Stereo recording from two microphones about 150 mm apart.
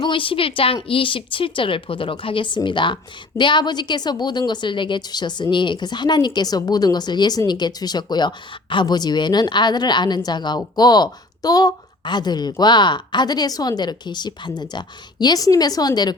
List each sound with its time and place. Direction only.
0.0 s a woman's voice: 35° left (ahead or behind)